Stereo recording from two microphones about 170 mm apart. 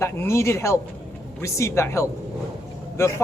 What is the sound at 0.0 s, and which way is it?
A man's voice, 15° left (ahead or behind).